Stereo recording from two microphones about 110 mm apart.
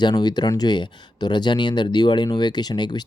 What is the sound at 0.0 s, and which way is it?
Speech, 40° left (ahead or behind).